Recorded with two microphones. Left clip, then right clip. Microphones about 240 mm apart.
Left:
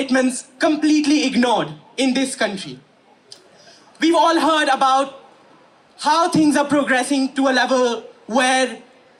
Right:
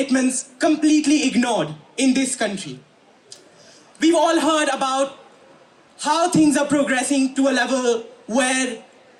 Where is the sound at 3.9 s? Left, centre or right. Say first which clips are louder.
Left 2 dB; centre.